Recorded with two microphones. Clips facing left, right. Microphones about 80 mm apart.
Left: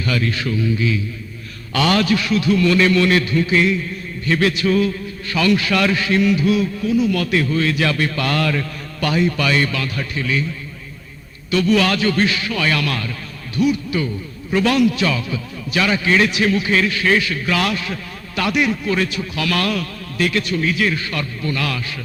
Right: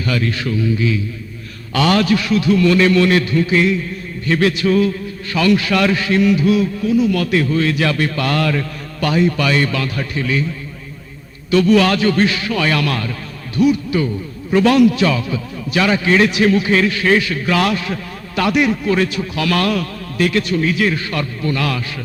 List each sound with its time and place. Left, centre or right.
0.0 s a man's voice: right
11.5 s a man's voice: right